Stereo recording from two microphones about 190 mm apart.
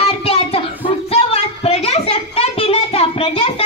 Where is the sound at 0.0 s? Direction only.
30° left (ahead or behind).